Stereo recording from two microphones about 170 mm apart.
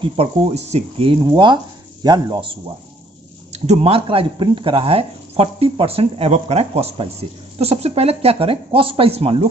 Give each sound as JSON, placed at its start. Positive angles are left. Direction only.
{"t": 0.0, "sound": "speech", "side_deg": -35}
{"t": 3.5, "sound": "speech", "side_deg": -40}